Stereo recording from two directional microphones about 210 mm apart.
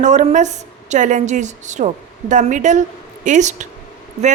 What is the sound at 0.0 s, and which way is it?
A woman's voice, 35° right (ahead or behind).